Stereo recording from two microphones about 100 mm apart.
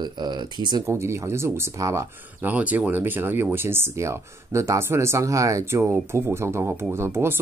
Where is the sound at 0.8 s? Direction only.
30° right (ahead or behind).